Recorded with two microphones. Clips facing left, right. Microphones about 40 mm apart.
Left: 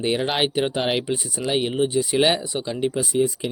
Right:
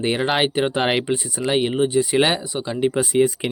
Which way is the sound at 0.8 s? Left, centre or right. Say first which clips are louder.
Right 3 dB; right.